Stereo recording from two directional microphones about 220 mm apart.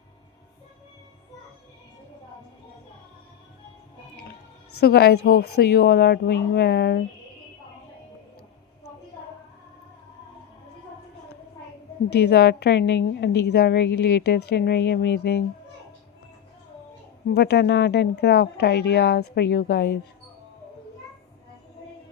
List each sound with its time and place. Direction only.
4.8 s a woman's voice: 45° left (ahead or behind)
12.2 s a woman's voice: 50° left (ahead or behind)
17.2 s a woman's voice: 50° left (ahead or behind)